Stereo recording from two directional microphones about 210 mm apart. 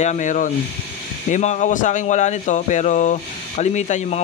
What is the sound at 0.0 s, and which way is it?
Speech, 35° left (ahead or behind).